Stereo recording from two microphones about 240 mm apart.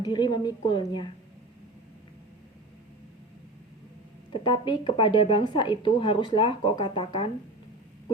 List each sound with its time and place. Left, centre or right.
0.0 s speech: centre
4.4 s speech: left